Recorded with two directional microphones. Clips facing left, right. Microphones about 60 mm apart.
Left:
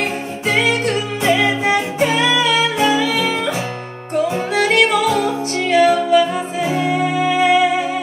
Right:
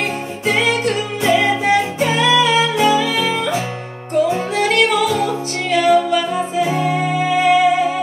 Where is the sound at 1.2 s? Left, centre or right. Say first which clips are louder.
Right 1 dB; centre.